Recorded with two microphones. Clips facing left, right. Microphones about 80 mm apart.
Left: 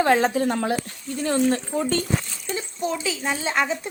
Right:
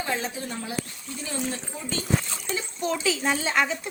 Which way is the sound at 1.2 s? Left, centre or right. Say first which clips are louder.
Left 11 dB; left.